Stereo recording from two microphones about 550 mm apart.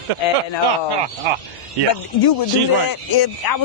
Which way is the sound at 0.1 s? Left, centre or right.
Right.